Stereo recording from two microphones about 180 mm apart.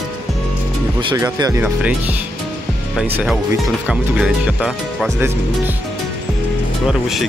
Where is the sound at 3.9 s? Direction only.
5° right (ahead or behind).